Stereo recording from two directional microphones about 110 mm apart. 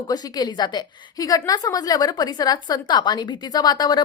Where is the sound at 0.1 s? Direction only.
40° left (ahead or behind).